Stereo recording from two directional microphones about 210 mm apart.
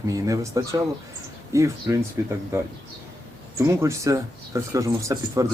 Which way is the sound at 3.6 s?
15° right (ahead or behind).